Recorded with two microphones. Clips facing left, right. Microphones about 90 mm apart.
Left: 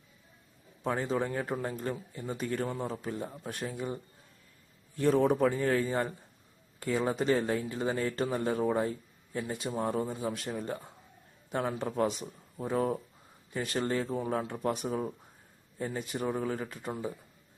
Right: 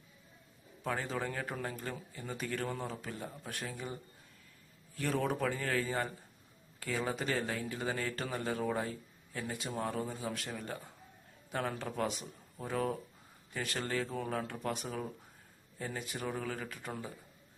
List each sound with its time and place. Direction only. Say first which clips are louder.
0.9 s a man's voice: left 6 dB; 25° left (ahead or behind)
11.5 s a man's voice: left 5 dB; 20° left (ahead or behind)